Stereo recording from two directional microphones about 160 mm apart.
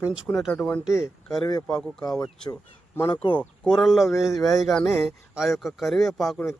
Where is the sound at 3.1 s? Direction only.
30° left (ahead or behind).